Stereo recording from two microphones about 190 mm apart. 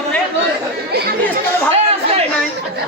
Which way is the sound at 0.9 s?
55° right (ahead or behind).